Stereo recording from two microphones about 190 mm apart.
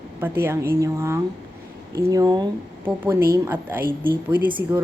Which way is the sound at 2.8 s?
10° right (ahead or behind).